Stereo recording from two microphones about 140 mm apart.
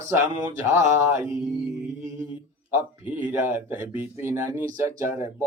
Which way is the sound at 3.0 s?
15° right (ahead or behind).